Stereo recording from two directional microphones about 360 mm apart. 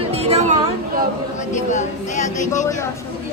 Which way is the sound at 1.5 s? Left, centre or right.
Centre.